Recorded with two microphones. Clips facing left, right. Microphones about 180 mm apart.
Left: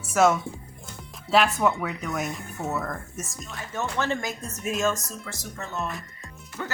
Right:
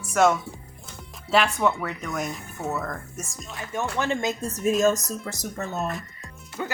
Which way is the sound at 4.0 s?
20° right (ahead or behind).